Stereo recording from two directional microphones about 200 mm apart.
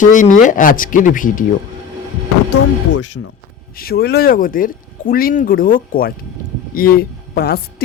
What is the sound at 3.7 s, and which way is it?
Speech, 50° left (ahead or behind).